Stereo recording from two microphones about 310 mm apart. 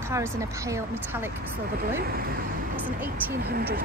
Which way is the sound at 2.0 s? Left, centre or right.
Right.